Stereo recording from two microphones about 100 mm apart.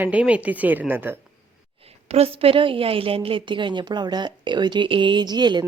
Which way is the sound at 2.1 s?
80° right.